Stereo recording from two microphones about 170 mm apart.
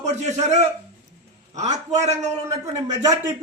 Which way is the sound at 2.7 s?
20° right (ahead or behind).